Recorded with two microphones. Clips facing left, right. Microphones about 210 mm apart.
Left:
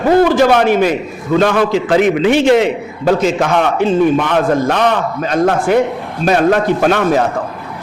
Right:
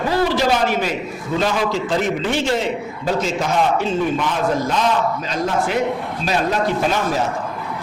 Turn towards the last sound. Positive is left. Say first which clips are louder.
# left 7 dB
turn(degrees=65)  # may be behind; listen again after turning